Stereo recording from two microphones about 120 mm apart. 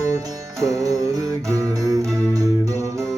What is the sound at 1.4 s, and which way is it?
Music, 30° right (ahead or behind).